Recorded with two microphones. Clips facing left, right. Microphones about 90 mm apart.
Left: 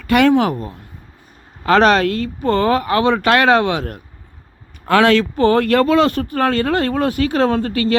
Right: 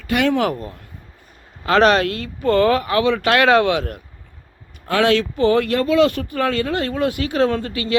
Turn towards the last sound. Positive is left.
turn(degrees=40)  # may be behind; listen again after turning